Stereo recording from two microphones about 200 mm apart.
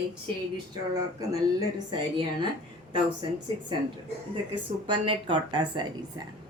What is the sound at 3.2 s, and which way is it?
Speech, 25° right (ahead or behind).